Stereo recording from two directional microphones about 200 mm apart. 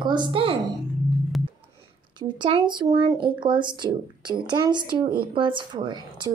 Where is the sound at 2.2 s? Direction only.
25° right (ahead or behind).